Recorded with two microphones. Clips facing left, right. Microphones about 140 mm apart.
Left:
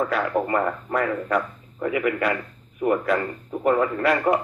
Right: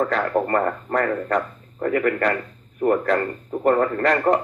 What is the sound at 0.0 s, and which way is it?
Speech, 10° left (ahead or behind).